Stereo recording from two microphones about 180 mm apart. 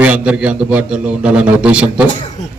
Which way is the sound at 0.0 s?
5° right (ahead or behind).